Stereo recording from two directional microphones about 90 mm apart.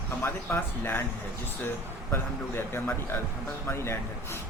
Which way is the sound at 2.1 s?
25° left (ahead or behind).